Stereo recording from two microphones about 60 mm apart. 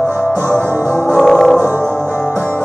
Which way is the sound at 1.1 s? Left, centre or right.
Centre.